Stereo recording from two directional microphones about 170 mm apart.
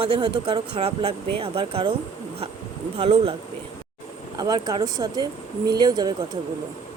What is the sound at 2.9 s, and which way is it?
Speech, 35° right (ahead or behind).